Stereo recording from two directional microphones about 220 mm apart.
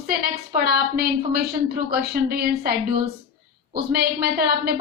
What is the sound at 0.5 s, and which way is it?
A woman's voice, 45° right (ahead or behind).